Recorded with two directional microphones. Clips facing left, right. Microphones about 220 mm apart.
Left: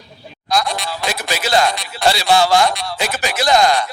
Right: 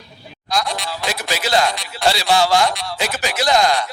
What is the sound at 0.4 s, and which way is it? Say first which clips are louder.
A man's voice: left 3 dB; 50° left (ahead or behind).